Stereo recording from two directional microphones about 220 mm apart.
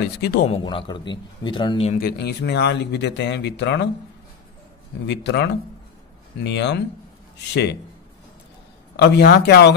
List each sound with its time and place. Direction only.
0.0 s speech: 45° left (ahead or behind)
0.5 s a man's voice: 20° left (ahead or behind)
2.0 s speech: 45° left (ahead or behind)
5.0 s speech: 50° left (ahead or behind)
8.9 s speech: 50° left (ahead or behind)